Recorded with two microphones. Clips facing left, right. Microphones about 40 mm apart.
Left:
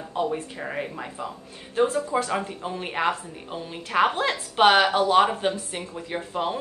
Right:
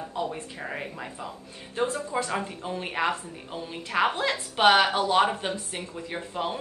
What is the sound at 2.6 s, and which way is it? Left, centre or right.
Speech, centre.